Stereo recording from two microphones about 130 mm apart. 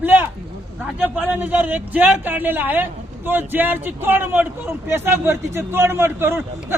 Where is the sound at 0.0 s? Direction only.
15° right (ahead or behind).